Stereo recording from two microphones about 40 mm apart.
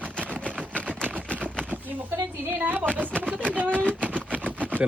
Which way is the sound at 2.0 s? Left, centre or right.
Right.